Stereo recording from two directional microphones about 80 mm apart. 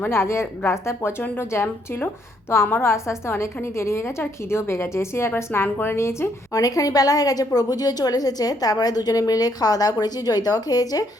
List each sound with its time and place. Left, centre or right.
0.1 s a woman's voice: left
6.5 s a woman's voice: left